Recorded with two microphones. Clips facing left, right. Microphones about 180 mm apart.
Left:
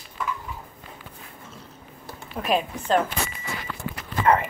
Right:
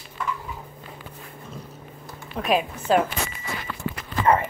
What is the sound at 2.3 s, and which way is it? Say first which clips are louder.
Speech: right 1 dB; centre (ahead or behind).